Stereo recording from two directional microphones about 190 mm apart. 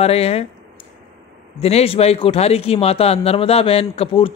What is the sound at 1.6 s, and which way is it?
Speech, 30° left (ahead or behind).